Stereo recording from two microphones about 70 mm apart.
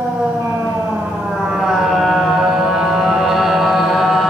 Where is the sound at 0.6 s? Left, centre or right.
Right.